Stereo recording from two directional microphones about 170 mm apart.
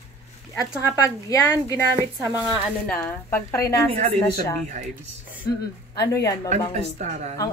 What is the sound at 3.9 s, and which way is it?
Speech, 35° right (ahead or behind).